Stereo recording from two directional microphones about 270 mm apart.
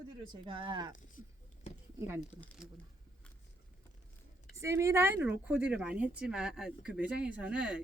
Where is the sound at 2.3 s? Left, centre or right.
Centre.